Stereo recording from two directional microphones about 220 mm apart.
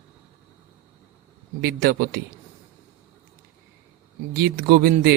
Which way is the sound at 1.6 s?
45° right (ahead or behind).